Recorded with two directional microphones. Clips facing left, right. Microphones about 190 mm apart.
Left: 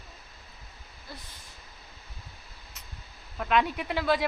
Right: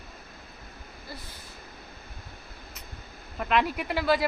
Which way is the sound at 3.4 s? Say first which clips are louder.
Even; 5° right (ahead or behind).